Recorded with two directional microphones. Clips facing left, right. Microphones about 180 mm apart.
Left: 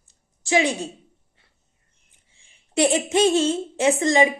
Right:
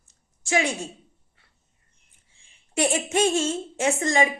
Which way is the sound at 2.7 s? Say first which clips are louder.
Left 4 dB; 30° left (ahead or behind).